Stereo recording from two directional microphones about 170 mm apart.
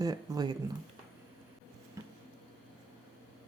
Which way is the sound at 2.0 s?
20° right (ahead or behind).